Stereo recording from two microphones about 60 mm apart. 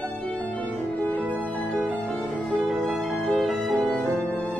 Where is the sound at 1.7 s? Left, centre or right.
Right.